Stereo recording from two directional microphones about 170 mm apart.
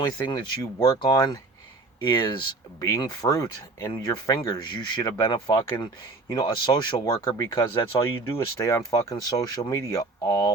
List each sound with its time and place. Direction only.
0.3 s speech: 20° left (ahead or behind)